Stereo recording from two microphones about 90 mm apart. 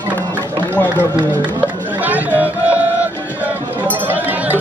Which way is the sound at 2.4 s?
20° right (ahead or behind).